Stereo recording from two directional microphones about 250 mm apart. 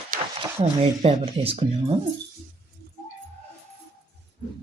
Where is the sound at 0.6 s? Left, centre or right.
Right.